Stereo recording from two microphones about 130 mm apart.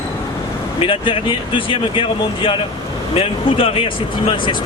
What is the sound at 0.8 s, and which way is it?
Speech, 45° left (ahead or behind).